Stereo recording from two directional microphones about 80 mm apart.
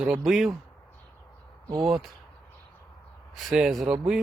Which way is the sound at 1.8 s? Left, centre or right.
Centre.